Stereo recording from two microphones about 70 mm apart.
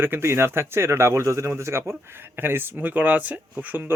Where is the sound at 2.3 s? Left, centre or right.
Right.